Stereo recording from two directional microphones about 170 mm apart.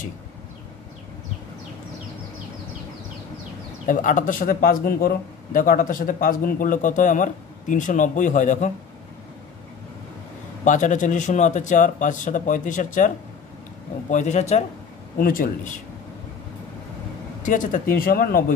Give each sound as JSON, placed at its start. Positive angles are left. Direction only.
{"t": 3.8, "sound": "speech", "side_deg": 50}
{"t": 10.6, "sound": "speech", "side_deg": 45}
{"t": 14.1, "sound": "speech", "side_deg": 45}
{"t": 15.1, "sound": "speech", "side_deg": 55}
{"t": 17.4, "sound": "speech", "side_deg": 50}